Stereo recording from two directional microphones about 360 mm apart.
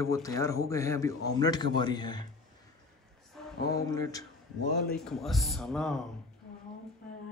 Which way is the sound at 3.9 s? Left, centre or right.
Centre.